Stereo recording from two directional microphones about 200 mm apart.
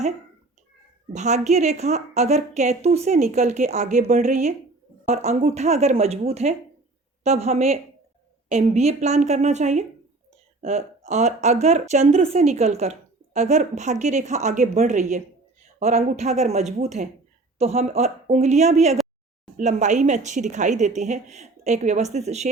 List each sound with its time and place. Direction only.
1.1 s speech: 35° right (ahead or behind)